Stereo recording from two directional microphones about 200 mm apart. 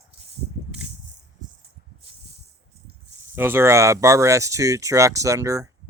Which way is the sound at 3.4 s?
10° right (ahead or behind).